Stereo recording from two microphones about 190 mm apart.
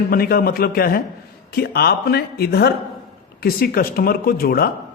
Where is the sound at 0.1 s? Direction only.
50° left (ahead or behind).